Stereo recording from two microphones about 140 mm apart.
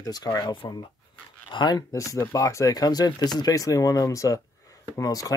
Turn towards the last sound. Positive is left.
turn(degrees=25)  # may be behind; listen again after turning